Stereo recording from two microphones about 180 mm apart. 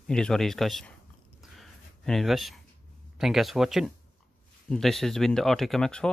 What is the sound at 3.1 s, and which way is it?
Speech, centre (ahead or behind).